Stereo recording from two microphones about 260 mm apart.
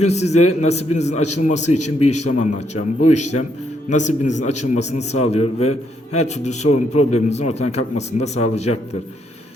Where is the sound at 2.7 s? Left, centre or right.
Left.